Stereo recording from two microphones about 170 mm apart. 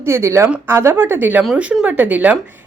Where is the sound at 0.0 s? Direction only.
15° right (ahead or behind).